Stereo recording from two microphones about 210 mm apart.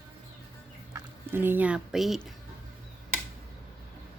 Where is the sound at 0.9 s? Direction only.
10° right (ahead or behind).